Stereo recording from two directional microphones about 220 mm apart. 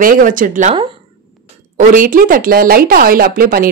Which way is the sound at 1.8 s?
40° right (ahead or behind).